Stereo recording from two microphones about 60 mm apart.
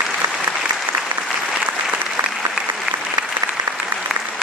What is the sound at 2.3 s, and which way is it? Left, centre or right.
Applause, centre.